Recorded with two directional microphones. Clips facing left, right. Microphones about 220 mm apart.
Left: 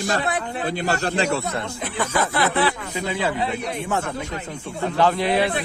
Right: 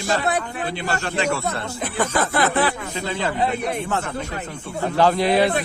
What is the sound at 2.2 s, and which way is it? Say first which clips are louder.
Speech: even; 50° right (ahead or behind).